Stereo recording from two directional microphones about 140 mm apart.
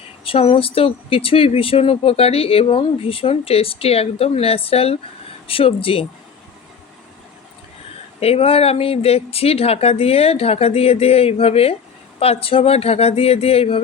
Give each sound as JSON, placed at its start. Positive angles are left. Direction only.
{"t": 0.3, "sound": "speech", "side_deg": 40}
{"t": 8.2, "sound": "speech", "side_deg": 45}